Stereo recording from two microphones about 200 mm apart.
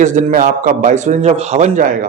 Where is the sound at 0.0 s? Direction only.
40° right (ahead or behind).